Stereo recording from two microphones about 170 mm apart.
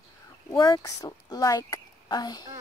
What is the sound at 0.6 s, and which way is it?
Speech, 20° left (ahead or behind).